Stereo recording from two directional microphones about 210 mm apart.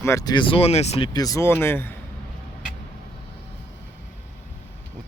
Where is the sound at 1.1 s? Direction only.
15° left (ahead or behind).